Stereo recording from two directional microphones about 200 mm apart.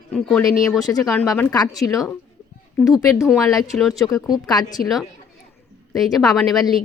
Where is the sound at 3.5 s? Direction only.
Centre (ahead or behind).